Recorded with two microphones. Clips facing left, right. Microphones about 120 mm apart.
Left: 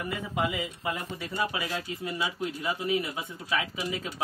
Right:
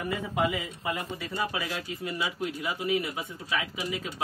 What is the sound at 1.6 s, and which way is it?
Speech, 25° left (ahead or behind).